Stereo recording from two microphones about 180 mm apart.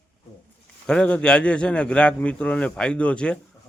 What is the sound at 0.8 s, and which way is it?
Speech, 5° left (ahead or behind).